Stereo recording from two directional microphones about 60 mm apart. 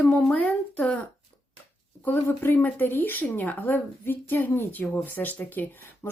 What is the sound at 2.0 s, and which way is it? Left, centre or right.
Speech, left.